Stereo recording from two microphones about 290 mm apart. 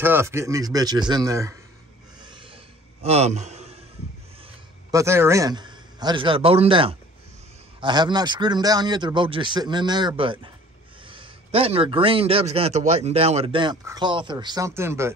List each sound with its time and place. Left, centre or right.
0.0 s a man's voice: centre
2.2 s a sound: centre
4.9 s a man's voice: centre